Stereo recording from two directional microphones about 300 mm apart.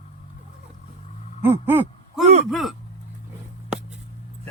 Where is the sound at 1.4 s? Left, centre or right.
Centre.